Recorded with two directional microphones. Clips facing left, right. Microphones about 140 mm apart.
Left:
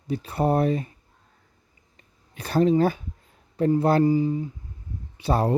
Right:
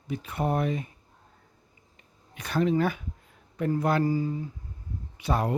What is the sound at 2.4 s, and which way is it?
Speech, 35° left (ahead or behind).